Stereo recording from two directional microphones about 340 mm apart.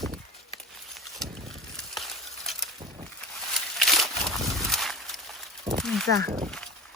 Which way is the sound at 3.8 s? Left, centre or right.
Centre.